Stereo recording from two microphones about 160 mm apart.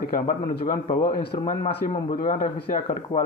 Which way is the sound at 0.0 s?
65° left (ahead or behind).